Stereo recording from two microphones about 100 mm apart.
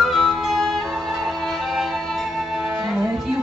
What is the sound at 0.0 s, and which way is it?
Music, centre (ahead or behind).